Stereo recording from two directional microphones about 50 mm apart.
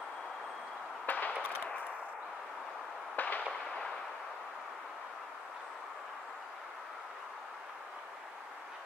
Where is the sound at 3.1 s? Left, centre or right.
Left.